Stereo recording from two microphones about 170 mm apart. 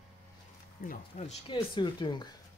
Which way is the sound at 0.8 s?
60° left (ahead or behind).